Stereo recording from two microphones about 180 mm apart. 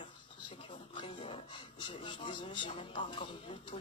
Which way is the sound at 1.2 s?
25° left (ahead or behind).